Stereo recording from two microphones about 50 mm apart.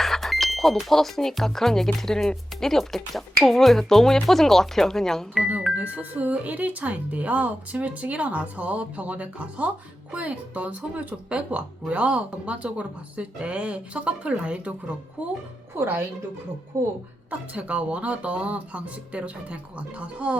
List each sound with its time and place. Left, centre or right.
0.0 s speech: centre
5.7 s speech: right
15.7 s speech: right
17.5 s speech: right